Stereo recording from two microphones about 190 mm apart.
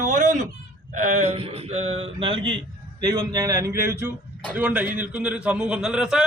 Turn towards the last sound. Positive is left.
turn(degrees=-5)  # may be behind; listen again after turning